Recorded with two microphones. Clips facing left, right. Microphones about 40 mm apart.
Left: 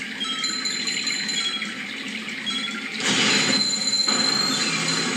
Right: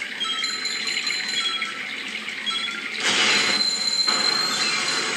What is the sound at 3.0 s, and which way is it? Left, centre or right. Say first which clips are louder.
Mechanisms: right 1 dB; centre.